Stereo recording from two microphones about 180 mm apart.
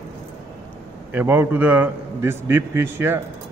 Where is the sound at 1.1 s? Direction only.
10° right (ahead or behind).